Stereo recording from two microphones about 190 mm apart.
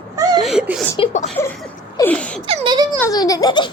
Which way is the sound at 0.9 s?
35° left (ahead or behind).